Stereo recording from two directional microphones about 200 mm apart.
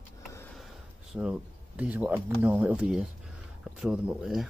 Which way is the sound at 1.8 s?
10° right (ahead or behind).